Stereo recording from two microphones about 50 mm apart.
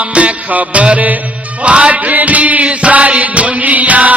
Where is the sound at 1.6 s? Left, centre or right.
Right.